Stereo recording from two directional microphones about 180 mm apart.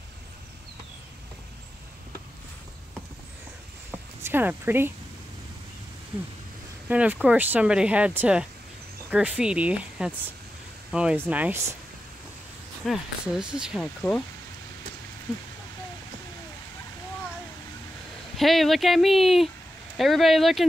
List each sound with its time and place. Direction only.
4.2 s speech: 10° right (ahead or behind)
6.9 s speech: 5° right (ahead or behind)
12.8 s speech: centre (ahead or behind)
18.3 s speech: centre (ahead or behind)